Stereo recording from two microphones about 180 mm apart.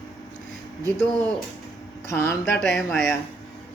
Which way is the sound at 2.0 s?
15° left (ahead or behind).